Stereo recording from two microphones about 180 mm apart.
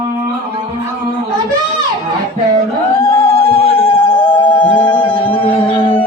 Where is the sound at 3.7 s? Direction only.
30° left (ahead or behind).